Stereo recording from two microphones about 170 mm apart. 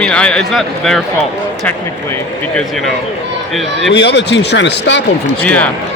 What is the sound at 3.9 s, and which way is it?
Speech, 90° left.